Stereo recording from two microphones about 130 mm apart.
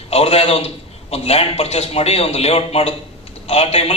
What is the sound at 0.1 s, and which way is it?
A man's voice, 50° left (ahead or behind).